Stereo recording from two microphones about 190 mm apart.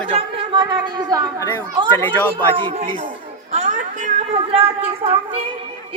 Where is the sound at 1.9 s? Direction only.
10° left (ahead or behind).